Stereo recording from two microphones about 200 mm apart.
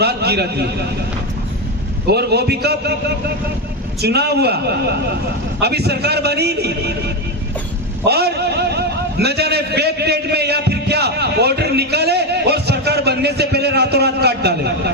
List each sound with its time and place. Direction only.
0.0 s a man's voice: 55° right (ahead or behind)
2.0 s a man's voice: 55° right (ahead or behind)
8.0 s a man's voice: 55° right (ahead or behind)